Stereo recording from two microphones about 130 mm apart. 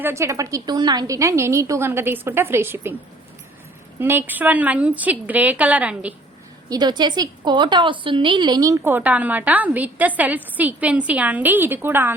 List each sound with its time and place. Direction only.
0.0 s a woman's voice: 20° right (ahead or behind)
4.0 s a woman's voice: 15° right (ahead or behind)
6.7 s a woman's voice: 35° right (ahead or behind); by 12.1 s 15° right (ahead or behind)